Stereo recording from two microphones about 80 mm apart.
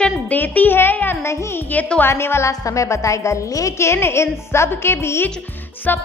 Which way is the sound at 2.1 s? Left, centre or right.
Left.